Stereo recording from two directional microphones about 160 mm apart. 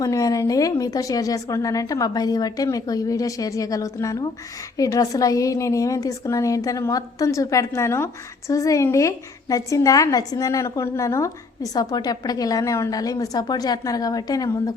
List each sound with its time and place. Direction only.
0.0 s a woman's voice: 20° left (ahead or behind)